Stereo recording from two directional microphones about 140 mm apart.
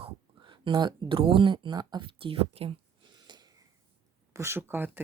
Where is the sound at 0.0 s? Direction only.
35° right (ahead or behind).